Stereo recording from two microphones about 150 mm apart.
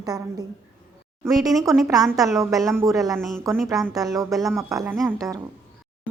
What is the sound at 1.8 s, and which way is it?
A woman's voice, 25° right (ahead or behind).